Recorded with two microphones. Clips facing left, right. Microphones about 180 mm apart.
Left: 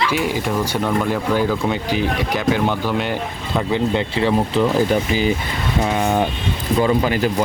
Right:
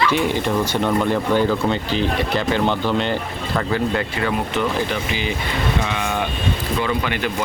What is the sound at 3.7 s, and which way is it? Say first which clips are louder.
Speech: left 3 dB; 20° left (ahead or behind).